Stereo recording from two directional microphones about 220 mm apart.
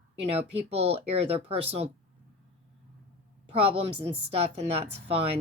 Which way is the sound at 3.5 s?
25° right (ahead or behind).